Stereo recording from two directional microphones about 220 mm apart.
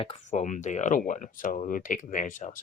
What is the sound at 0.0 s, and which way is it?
Speech, 30° left (ahead or behind).